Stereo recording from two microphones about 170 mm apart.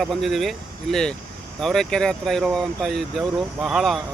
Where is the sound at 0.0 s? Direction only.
Centre (ahead or behind).